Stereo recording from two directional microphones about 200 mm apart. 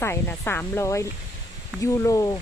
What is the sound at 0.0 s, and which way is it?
Speech, 10° left (ahead or behind).